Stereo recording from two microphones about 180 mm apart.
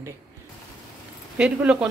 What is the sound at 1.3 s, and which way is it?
Speech, 5° right (ahead or behind).